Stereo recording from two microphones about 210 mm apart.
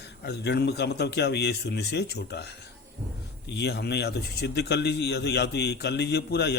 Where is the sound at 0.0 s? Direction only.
50° left (ahead or behind).